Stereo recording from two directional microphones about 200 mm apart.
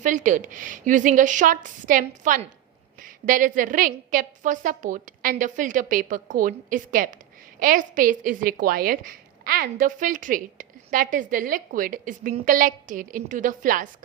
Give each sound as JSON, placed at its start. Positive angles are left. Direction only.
{"t": 0.0, "sound": "a woman's voice", "side_deg": -40}